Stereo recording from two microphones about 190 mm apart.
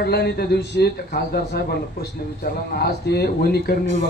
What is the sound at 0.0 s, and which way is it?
A man's voice, 55° left (ahead or behind).